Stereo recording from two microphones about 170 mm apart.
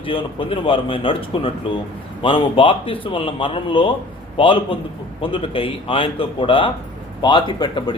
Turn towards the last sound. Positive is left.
turn(degrees=25)  # may be behind; listen again after turning